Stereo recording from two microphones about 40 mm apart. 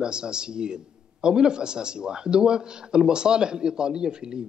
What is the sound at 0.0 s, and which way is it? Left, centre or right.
A man's voice, right.